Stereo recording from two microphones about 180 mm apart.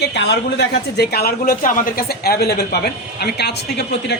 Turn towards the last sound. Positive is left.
turn(degrees=70)  # may be behind; listen again after turning